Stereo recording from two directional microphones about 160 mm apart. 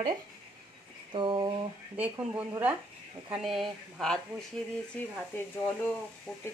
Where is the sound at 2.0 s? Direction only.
10° right (ahead or behind).